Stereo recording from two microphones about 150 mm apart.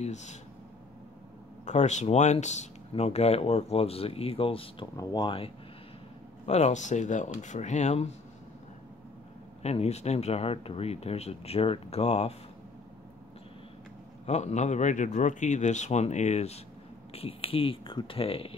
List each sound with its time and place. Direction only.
0.0 s speech: 50° left (ahead or behind)
1.7 s speech: 50° left (ahead or behind)
4.9 s speech: 25° left (ahead or behind)
6.4 s speech: 45° left (ahead or behind)
9.6 s speech: 45° left (ahead or behind)
14.2 s speech: 50° left (ahead or behind)